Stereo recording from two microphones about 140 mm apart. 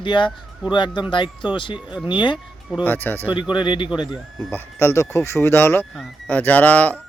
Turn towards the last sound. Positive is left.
turn(degrees=10)  # may be behind; listen again after turning